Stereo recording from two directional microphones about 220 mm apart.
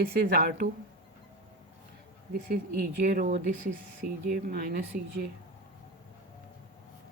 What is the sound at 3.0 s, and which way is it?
Speech, 35° right (ahead or behind).